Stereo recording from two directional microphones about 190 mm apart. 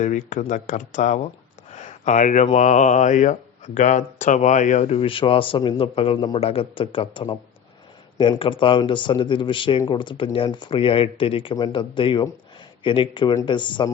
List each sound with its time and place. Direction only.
0.0 s speech: 40° left (ahead or behind); by 13.9 s 25° left (ahead or behind)